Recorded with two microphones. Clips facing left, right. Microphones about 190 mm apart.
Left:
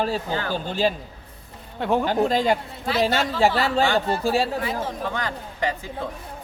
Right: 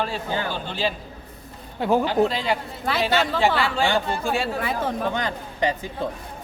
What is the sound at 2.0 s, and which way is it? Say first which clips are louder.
Speech: left 1 dB; 45° left (ahead or behind).